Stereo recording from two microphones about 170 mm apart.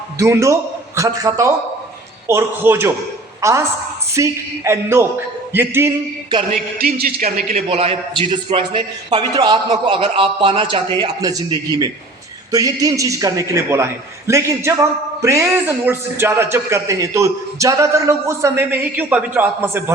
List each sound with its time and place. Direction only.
0.2 s a man's voice: 15° right (ahead or behind)
6.7 s a man's voice: 60° right (ahead or behind); by 19.8 s 10° right (ahead or behind)